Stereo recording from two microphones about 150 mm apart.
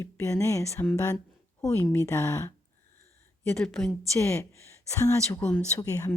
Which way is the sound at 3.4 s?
5° left (ahead or behind).